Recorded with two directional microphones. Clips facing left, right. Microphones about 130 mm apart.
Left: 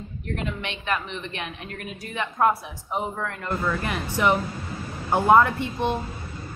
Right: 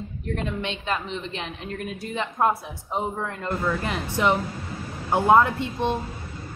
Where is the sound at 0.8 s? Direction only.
25° right (ahead or behind).